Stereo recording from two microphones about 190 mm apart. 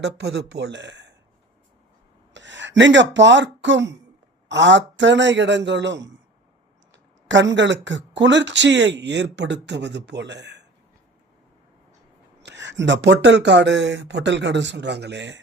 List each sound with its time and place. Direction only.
0.0 s speech: 60° right (ahead or behind)
2.3 s speech: 70° right (ahead or behind)
12.4 s speech: 70° right (ahead or behind)